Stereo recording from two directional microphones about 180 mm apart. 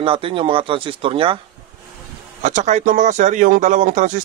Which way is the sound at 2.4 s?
40° right (ahead or behind).